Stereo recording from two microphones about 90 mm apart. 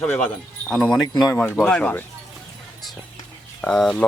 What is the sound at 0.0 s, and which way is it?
Speech, 10° left (ahead or behind).